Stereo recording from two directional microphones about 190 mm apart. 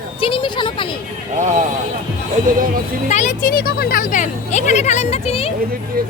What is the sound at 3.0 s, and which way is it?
Speech, 40° left (ahead or behind).